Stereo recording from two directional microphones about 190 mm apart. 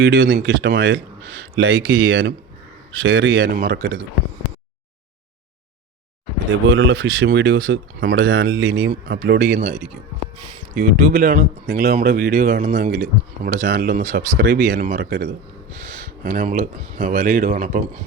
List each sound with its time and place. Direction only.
0.0 s speech: 70° right (ahead or behind)
3.0 s a man's voice: 90° right; by 3.5 s 75° right (ahead or behind)
3.5 s speech: 55° right (ahead or behind)
6.7 s speech: 80° right; by 9.6 s 55° right (ahead or behind)
10.8 s speech: 50° right (ahead or behind)